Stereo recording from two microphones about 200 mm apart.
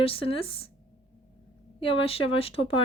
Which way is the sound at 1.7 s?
25° left (ahead or behind).